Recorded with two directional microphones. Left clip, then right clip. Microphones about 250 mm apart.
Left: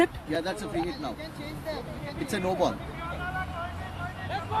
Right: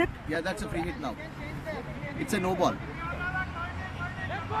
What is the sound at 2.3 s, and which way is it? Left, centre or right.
Speech, right.